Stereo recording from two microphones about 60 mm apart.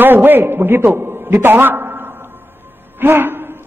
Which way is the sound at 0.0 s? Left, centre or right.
Right.